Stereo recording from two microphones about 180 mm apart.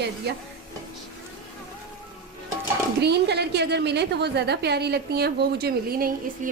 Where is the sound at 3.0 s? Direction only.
65° right (ahead or behind).